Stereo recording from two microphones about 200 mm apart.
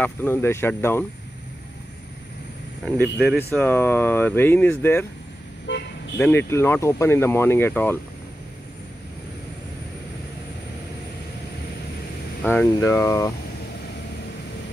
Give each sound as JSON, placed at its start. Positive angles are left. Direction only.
{"t": 0.0, "sound": "speech", "side_deg": 10}
{"t": 2.8, "sound": "speech", "side_deg": 0}
{"t": 5.7, "sound": "speech", "side_deg": 60}
{"t": 6.1, "sound": "speech", "side_deg": 10}
{"t": 12.4, "sound": "speech", "side_deg": 10}